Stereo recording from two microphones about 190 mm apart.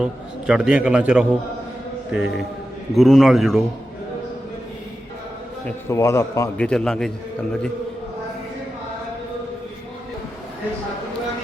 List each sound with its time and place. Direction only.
0.0 s a man's voice: 5° right (ahead or behind)
5.6 s a man's voice: 15° left (ahead or behind)
6.6 s a man's voice: 5° left (ahead or behind)